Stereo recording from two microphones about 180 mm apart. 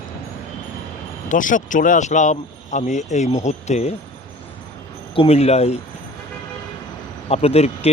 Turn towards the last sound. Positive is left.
turn(degrees=35)  # may be behind; listen again after turning